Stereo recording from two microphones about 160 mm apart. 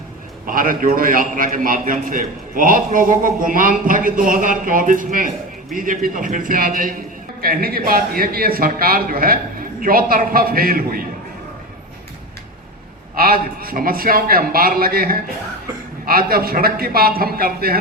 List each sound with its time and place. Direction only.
0.4 s a man's voice: 60° right (ahead or behind)
13.1 s a man's voice: 65° right (ahead or behind)